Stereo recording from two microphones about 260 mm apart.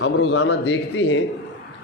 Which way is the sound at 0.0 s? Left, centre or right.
Left.